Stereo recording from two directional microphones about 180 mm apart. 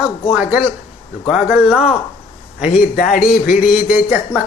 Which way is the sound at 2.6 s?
50° left (ahead or behind).